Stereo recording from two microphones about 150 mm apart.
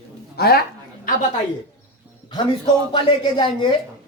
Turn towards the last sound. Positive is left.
turn(degrees=30)  # may be behind; listen again after turning